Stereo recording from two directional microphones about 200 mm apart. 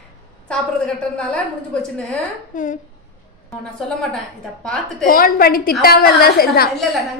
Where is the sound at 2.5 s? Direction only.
40° left (ahead or behind).